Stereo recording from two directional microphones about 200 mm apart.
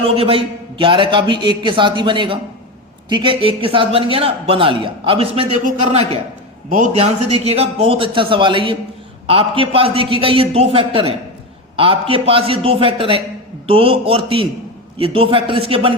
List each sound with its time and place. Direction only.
0.0 s a man's voice: 30° right (ahead or behind)